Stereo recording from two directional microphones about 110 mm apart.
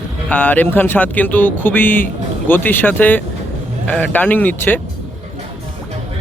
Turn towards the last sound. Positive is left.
turn(degrees=15)  # may be behind; listen again after turning